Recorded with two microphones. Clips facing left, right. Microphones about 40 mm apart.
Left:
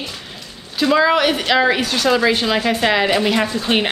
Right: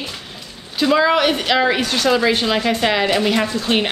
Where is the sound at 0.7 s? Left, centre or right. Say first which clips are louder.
Even; centre.